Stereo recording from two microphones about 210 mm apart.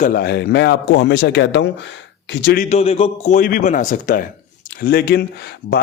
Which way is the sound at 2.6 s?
30° left (ahead or behind).